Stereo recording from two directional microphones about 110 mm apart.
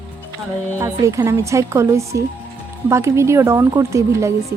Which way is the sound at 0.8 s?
30° right (ahead or behind).